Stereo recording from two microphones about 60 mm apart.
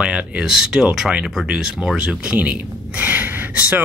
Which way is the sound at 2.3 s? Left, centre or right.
Right.